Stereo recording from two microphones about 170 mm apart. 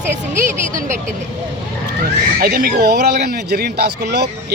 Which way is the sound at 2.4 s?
65° right (ahead or behind).